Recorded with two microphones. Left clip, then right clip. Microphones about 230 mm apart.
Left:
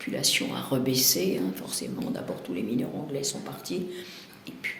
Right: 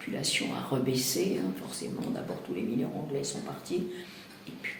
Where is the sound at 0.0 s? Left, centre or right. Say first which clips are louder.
Left 5 dB; left.